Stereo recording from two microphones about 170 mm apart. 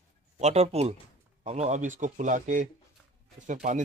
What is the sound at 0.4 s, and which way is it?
Speech, 40° right (ahead or behind).